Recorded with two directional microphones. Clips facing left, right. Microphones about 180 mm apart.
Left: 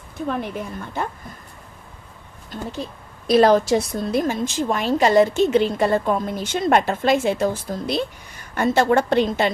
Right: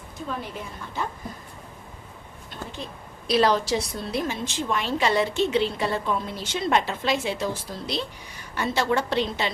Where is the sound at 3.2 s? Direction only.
50° left (ahead or behind).